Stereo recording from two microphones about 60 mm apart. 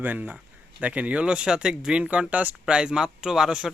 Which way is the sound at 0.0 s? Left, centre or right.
Right.